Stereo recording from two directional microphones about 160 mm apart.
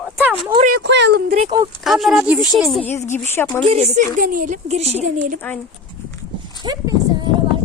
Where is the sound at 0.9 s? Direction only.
90° right.